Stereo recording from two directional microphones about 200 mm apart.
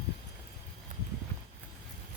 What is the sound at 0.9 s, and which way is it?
Clip-clop, 40° right (ahead or behind).